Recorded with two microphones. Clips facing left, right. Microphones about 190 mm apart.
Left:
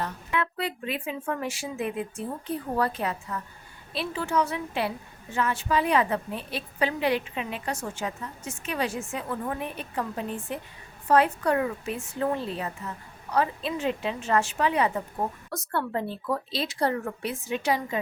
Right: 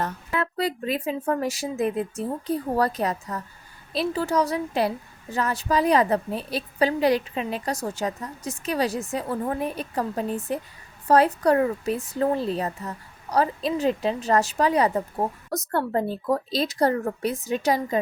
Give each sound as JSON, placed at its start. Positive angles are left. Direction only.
{"t": 0.0, "sound": "a woman's voice", "side_deg": -40}